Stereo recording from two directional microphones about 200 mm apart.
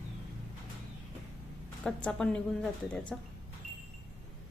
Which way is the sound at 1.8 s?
5° left (ahead or behind).